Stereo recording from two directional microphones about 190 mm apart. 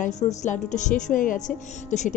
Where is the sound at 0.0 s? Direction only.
40° left (ahead or behind).